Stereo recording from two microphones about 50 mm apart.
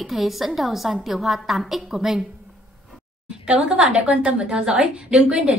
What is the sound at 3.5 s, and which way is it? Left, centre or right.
A woman's voice, centre.